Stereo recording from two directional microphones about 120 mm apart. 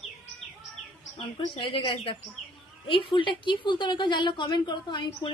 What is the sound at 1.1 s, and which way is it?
A woman's voice, 45° left (ahead or behind).